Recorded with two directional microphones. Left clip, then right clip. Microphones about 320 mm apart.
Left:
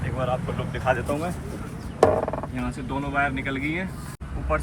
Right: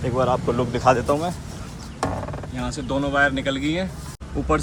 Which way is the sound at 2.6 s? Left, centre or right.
Centre.